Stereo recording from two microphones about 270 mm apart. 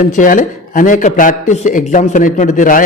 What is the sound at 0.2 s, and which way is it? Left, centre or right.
A man's voice, left.